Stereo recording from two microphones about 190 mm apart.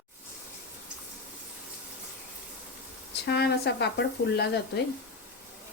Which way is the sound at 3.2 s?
60° left (ahead or behind).